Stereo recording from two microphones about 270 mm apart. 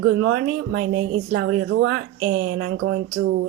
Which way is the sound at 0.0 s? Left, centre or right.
Right.